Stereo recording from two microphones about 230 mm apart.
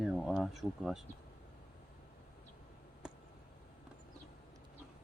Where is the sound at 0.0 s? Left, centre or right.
Centre.